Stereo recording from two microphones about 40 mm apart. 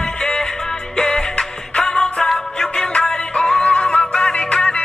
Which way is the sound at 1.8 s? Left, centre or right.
Centre.